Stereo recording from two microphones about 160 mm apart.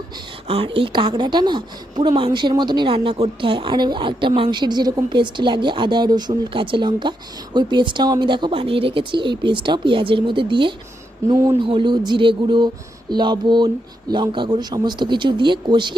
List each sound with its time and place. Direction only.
0.4 s a woman's voice: 35° right (ahead or behind)
11.3 s a woman's voice: 20° right (ahead or behind)
11.6 s a woman's voice: 30° right (ahead or behind)